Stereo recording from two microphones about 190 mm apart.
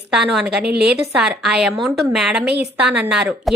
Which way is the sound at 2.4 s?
60° right (ahead or behind).